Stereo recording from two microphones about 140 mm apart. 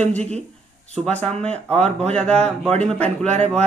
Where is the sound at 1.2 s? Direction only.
50° right (ahead or behind).